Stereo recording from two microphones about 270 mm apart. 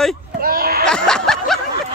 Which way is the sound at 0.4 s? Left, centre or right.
Right.